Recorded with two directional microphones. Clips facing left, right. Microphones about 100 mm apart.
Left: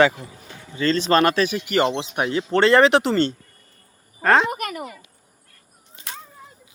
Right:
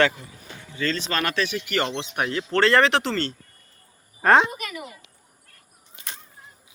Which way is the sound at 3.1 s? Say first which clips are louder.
Left 7 dB; 30° left (ahead or behind).